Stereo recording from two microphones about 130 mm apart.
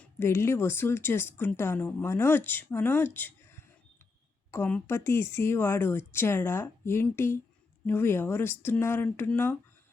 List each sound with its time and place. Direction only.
0.0 s speech: 20° left (ahead or behind)